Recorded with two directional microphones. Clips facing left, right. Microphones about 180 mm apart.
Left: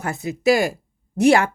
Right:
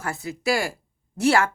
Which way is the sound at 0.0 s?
20° left (ahead or behind).